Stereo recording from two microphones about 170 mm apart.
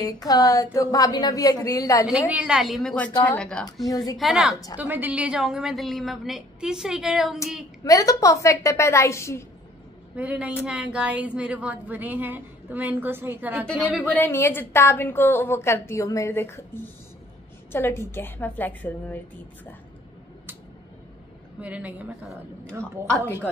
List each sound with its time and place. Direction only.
0.0 s a woman's voice: 20° left (ahead or behind)
2.2 s a woman's voice: 5° right (ahead or behind)
3.8 s a woman's voice: 20° left (ahead or behind)
4.2 s a woman's voice: 5° right (ahead or behind)
7.8 s a woman's voice: 20° left (ahead or behind)
10.1 s a woman's voice: 10° right (ahead or behind)
13.7 s a woman's voice: 10° left (ahead or behind)
21.5 s a woman's voice: 10° right (ahead or behind)